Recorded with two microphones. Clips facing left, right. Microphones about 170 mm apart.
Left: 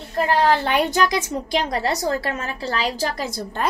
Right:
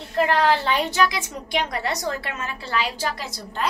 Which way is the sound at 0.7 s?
55° left (ahead or behind).